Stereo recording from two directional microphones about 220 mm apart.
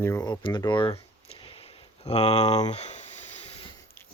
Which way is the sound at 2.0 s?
30° left (ahead or behind).